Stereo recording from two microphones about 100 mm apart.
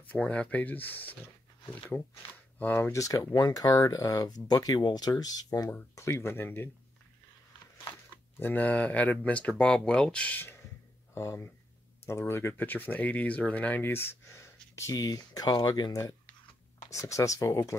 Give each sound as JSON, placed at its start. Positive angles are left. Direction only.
{"t": 0.1, "sound": "speech", "side_deg": 15}
{"t": 2.9, "sound": "speech", "side_deg": 30}
{"t": 5.9, "sound": "speech", "side_deg": 25}
{"t": 8.4, "sound": "speech", "side_deg": 20}